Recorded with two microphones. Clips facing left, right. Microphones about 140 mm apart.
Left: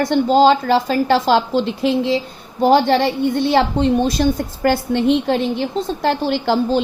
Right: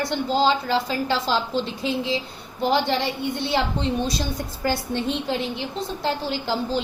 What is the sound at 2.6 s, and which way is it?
A woman's voice, 50° left (ahead or behind).